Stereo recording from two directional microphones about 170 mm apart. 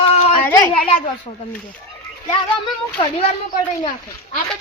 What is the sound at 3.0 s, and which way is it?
Speech, 35° left (ahead or behind).